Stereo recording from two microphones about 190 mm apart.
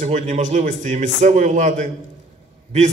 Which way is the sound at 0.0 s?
40° right (ahead or behind).